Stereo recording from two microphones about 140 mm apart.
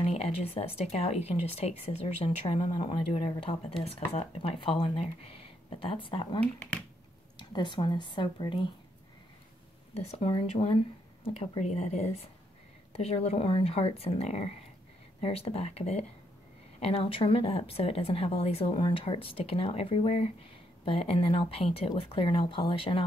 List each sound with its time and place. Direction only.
0.0 s speech: 45° left (ahead or behind)
6.4 s speech: 10° left (ahead or behind)
7.3 s speech: 35° left (ahead or behind)
9.9 s speech: 45° left (ahead or behind)